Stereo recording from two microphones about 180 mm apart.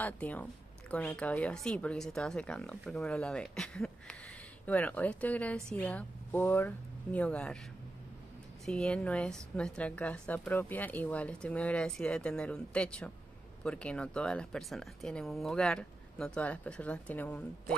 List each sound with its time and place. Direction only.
0.0 s a woman's voice: 10° left (ahead or behind)
8.6 s a woman's voice: 5° left (ahead or behind)